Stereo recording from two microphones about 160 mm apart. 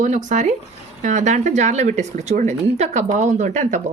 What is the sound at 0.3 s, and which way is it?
A woman's voice, 50° right (ahead or behind).